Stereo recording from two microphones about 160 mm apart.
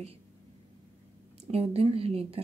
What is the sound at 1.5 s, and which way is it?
Speech, 40° right (ahead or behind).